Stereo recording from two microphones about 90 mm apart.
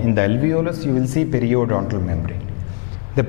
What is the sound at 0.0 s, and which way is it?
A man's voice, 10° left (ahead or behind).